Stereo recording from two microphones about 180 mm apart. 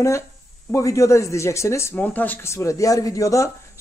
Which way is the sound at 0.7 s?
15° left (ahead or behind).